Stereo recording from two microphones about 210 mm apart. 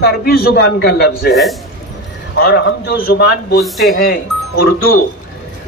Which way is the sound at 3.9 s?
45° left (ahead or behind).